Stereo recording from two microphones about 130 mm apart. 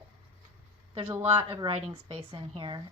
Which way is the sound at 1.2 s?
45° right (ahead or behind).